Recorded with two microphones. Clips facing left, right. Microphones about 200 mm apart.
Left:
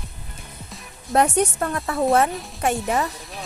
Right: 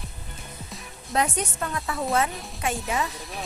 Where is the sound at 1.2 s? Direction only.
50° left (ahead or behind).